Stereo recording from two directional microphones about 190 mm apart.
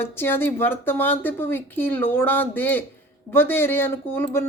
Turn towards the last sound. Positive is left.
turn(degrees=10)  # may be behind; listen again after turning